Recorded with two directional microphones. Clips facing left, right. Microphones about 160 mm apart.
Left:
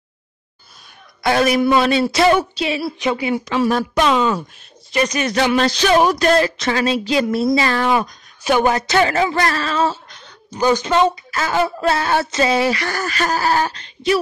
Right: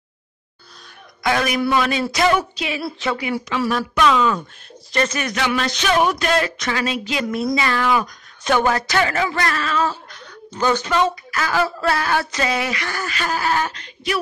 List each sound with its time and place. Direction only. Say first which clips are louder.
1.2 s a sound: left 4 dB; 30° left (ahead or behind)
1.8 s a woman's voice: left 4 dB; 30° left (ahead or behind)
4.9 s speech: left 2 dB; 15° left (ahead or behind)
5.2 s a sound: left 5 dB; 30° left (ahead or behind)
8.5 s a woman's voice: left 2 dB; 15° left (ahead or behind)
10.5 s speech: left 3 dB; 15° left (ahead or behind)
10.9 s a woman's voice: left 3 dB; 25° left (ahead or behind)